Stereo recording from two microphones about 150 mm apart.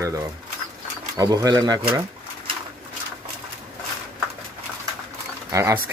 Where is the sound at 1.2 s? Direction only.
25° right (ahead or behind).